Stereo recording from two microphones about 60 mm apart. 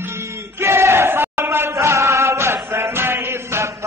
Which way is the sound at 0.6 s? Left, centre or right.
Right.